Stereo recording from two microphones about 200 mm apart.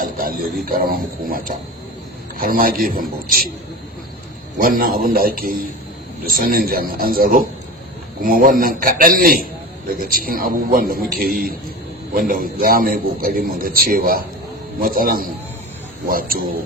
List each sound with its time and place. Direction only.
0.0 s a sound: 45° right (ahead or behind)
0.6 s a man's voice: 45° right (ahead or behind)
4.5 s a man's voice: 45° right (ahead or behind)